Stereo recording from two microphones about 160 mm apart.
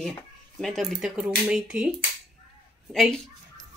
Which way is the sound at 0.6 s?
Centre (ahead or behind).